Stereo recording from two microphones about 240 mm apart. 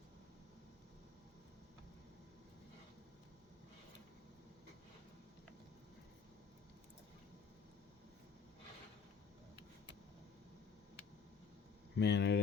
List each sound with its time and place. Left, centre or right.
11.9 s speech: left